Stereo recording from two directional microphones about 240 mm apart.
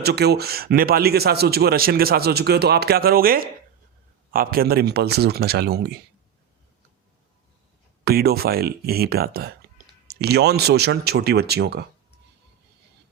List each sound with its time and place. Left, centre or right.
0.0 s speech: right
8.0 s speech: right